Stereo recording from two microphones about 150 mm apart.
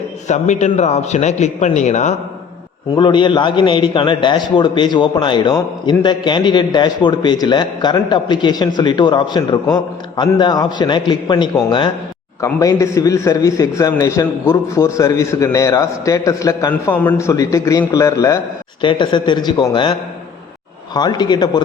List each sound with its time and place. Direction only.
0.3 s a man's voice: 50° left (ahead or behind)
2.9 s a man's voice: 30° left (ahead or behind)
16.9 s a man's voice: 10° left (ahead or behind)
18.8 s a man's voice: 30° left (ahead or behind)
20.9 s a man's voice: 30° left (ahead or behind)